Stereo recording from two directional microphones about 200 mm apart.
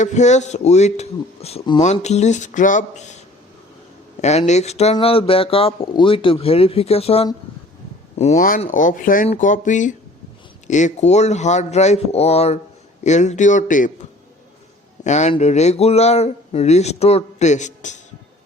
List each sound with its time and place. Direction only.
0.0 s speech: 35° left (ahead or behind)
4.2 s speech: 35° left (ahead or behind)